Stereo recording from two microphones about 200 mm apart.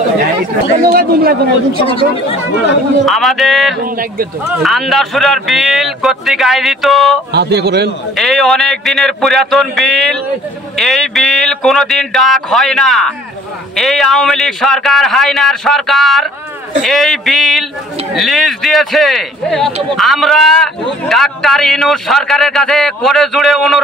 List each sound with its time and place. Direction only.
0.9 s a man's voice: 50° right (ahead or behind)
1.8 s speech: 30° left (ahead or behind)
3.1 s speech: centre (ahead or behind)
3.8 s a man's voice: 45° right (ahead or behind)
4.6 s speech: centre (ahead or behind)
7.3 s a man's voice: 55° right (ahead or behind)
8.2 s speech: centre (ahead or behind)